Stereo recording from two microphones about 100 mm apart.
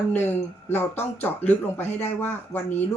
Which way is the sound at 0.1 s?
20° left (ahead or behind).